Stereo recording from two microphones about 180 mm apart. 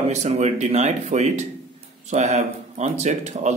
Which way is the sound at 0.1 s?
40° right (ahead or behind).